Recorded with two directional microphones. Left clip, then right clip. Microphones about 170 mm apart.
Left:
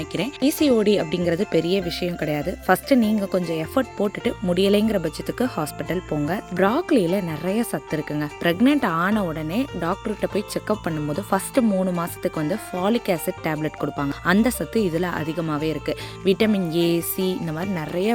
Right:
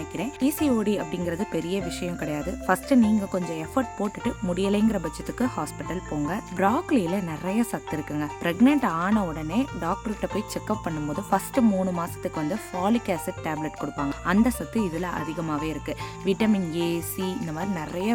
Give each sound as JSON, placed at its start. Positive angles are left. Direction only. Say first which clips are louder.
{"t": 0.2, "sound": "speech", "louder": "left 5 dB", "side_deg": 20}